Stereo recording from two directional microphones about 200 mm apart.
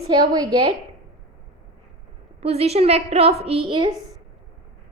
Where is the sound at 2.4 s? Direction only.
30° right (ahead or behind).